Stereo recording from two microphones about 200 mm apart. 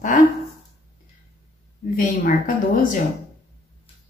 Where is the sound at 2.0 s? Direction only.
45° left (ahead or behind).